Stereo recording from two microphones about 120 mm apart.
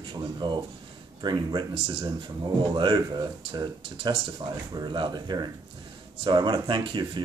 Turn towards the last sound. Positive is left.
turn(degrees=-40)  # may be behind; listen again after turning